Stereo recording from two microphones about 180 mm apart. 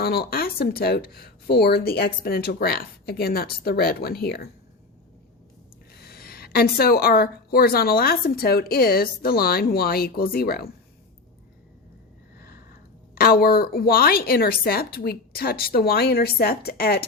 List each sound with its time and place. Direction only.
0.0 s a woman's voice: 55° left (ahead or behind)
5.9 s a woman's voice: 60° left (ahead or behind)
13.1 s a woman's voice: 55° left (ahead or behind)